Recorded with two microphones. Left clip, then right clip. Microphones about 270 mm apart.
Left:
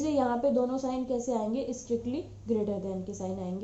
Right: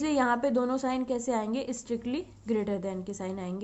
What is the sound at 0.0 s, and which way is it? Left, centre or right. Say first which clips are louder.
A woman's voice: right 1 dB; right.